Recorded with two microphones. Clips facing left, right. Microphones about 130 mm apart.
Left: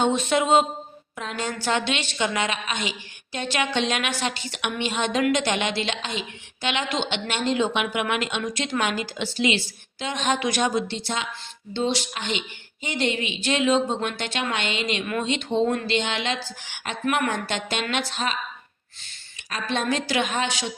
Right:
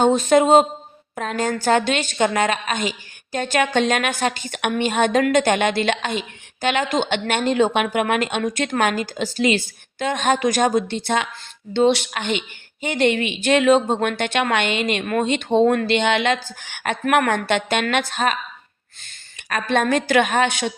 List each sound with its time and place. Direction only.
0.0 s a woman's voice: 40° right (ahead or behind)
19.5 s a woman's voice: 55° right (ahead or behind)